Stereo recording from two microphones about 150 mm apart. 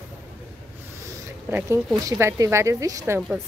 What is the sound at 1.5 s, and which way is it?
A woman's voice, 15° right (ahead or behind).